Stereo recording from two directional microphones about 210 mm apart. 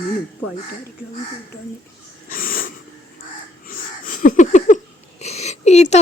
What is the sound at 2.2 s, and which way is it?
Wheeze, 40° left (ahead or behind).